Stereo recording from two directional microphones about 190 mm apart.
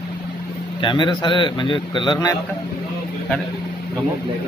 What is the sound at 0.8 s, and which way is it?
A man's voice, 25° left (ahead or behind).